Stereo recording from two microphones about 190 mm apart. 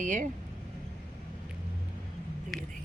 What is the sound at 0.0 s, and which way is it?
Speech, 40° right (ahead or behind).